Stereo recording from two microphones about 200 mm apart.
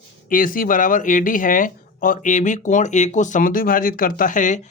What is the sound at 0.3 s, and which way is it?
Speech, 45° left (ahead or behind).